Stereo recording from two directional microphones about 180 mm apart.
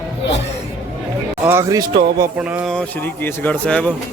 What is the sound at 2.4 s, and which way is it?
Speech, 5° right (ahead or behind).